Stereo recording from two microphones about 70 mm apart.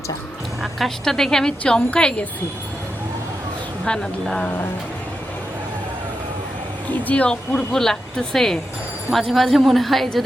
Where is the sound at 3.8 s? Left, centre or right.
Centre.